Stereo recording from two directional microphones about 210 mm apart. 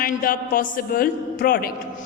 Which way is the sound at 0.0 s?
40° left (ahead or behind).